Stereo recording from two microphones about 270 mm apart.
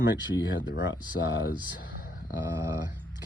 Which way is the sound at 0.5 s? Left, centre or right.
Left.